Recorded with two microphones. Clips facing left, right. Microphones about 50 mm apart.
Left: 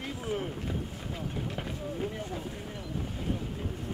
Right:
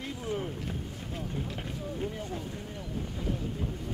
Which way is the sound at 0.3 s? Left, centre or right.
Centre.